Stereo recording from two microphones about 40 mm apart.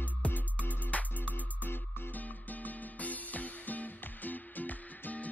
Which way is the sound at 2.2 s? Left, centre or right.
Left.